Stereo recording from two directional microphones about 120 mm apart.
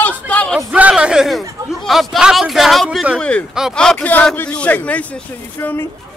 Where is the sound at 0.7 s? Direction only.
10° right (ahead or behind); by 5.8 s 15° left (ahead or behind).